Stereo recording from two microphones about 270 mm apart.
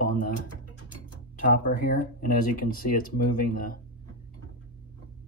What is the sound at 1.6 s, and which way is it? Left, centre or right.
Speech, left.